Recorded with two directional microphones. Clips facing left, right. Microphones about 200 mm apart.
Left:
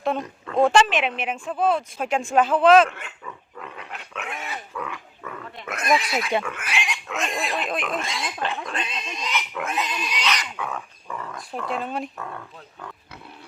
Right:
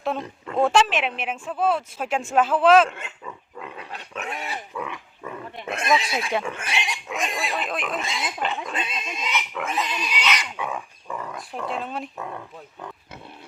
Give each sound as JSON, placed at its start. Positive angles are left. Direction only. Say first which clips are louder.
{"t": 0.5, "sound": "speech", "louder": "left 2 dB", "side_deg": -5}
{"t": 3.8, "sound": "dog", "louder": "right 1 dB", "side_deg": -35}
{"t": 4.7, "sound": "speech", "louder": "right 1 dB", "side_deg": -15}
{"t": 7.3, "sound": "speech", "louder": "left 2 dB", "side_deg": 0}
{"t": 10.6, "sound": "dog", "louder": "right 1 dB", "side_deg": -15}
{"t": 11.7, "sound": "speech", "louder": "left 3 dB", "side_deg": 0}
{"t": 12.1, "sound": "speech", "louder": "right 2 dB", "side_deg": -15}